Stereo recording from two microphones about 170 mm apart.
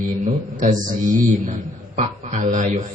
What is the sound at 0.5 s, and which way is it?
A man's voice, 50° right (ahead or behind).